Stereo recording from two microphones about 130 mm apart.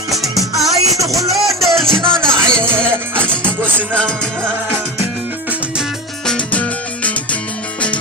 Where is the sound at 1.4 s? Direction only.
Centre (ahead or behind).